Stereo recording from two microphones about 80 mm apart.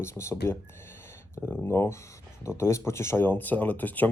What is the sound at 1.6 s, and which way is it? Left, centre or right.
Speech, left.